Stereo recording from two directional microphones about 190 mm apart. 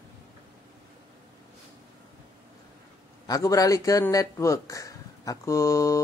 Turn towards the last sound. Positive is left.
turn(degrees=15)  # may be behind; listen again after turning